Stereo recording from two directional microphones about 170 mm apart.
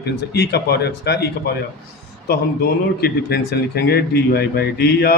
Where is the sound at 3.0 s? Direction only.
65° left (ahead or behind).